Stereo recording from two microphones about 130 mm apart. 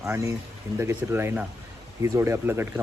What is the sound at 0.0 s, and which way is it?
Speech, 20° right (ahead or behind).